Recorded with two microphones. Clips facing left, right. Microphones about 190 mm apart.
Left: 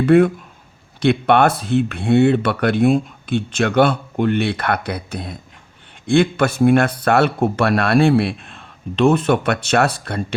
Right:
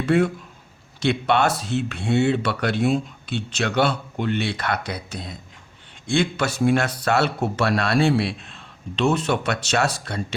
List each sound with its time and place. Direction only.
0.0 s speech: 55° left (ahead or behind)